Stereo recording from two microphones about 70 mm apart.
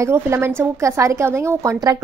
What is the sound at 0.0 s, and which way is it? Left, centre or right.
A woman's voice, right.